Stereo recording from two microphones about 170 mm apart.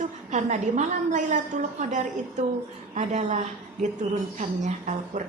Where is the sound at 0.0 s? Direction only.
45° right (ahead or behind).